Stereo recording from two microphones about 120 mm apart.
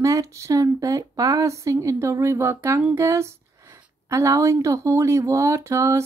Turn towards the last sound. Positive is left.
turn(degrees=-25)  # may be behind; listen again after turning